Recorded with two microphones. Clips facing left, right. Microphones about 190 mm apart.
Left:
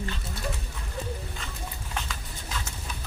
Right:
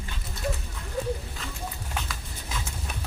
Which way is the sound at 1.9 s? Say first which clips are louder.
Even; 5° right (ahead or behind).